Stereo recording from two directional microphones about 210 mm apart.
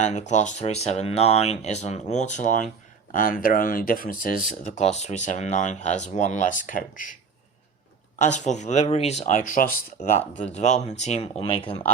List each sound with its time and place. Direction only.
0.0 s speech: 35° left (ahead or behind)
8.2 s speech: 35° left (ahead or behind)